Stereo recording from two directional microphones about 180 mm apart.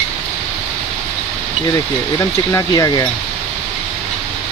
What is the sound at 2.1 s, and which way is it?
Speech, 20° left (ahead or behind).